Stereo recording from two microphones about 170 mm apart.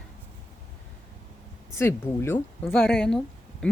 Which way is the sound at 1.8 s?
15° left (ahead or behind).